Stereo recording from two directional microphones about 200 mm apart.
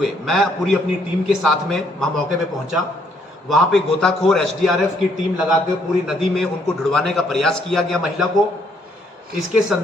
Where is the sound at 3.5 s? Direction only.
Centre (ahead or behind).